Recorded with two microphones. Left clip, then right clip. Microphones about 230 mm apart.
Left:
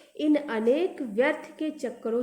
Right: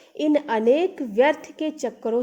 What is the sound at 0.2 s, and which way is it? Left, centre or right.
A woman's voice, right.